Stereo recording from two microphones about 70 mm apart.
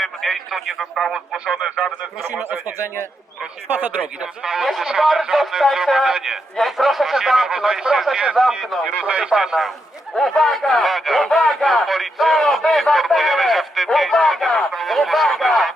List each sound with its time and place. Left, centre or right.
0.0 s speech: centre
2.3 s speech: right
4.4 s speech: centre
9.0 s speech: centre